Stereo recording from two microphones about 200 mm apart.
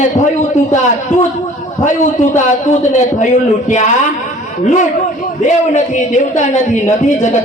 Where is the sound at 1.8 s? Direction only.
40° left (ahead or behind).